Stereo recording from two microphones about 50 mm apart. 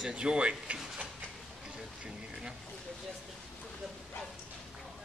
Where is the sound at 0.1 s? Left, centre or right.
Centre.